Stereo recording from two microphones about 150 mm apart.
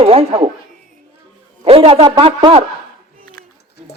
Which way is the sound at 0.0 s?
40° right (ahead or behind).